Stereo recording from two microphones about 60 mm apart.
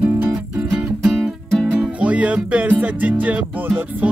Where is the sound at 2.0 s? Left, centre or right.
Right.